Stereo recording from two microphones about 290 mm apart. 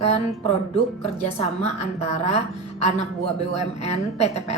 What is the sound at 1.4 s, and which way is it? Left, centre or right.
A woman's voice, left.